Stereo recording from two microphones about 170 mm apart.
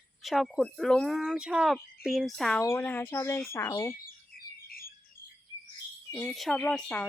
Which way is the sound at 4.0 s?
60° left (ahead or behind).